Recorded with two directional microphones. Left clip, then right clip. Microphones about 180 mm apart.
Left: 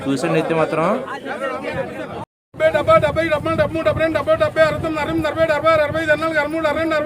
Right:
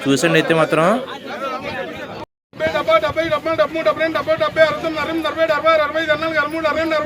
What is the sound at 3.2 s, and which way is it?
Speech, 40° left (ahead or behind).